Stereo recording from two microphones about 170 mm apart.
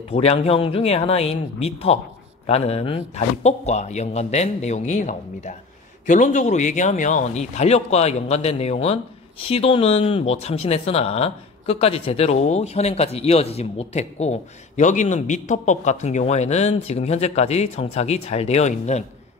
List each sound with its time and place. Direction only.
0.1 s speech: 35° left (ahead or behind)